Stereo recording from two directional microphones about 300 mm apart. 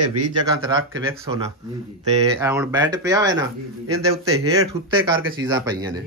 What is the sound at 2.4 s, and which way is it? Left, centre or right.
Speech, centre.